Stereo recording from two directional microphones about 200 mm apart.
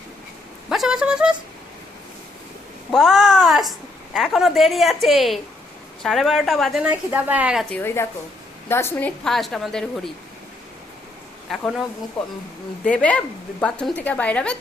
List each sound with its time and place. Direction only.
0.7 s a woman's voice: centre (ahead or behind)
2.9 s a woman's voice: centre (ahead or behind)
7.8 s a woman's voice: 10° left (ahead or behind)
11.4 s speech: centre (ahead or behind)
12.8 s a woman's voice: 5° left (ahead or behind)